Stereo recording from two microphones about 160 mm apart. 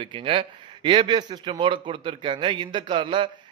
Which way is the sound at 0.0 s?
30° right (ahead or behind).